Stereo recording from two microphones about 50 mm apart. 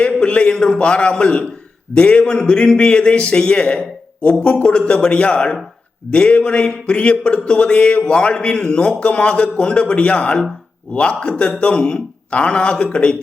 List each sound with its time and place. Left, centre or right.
0.0 s speech: left